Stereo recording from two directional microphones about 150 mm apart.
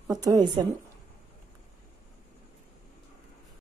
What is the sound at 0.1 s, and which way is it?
Speech, 25° right (ahead or behind).